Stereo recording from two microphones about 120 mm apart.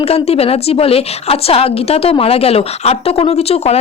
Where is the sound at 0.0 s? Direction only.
55° left (ahead or behind).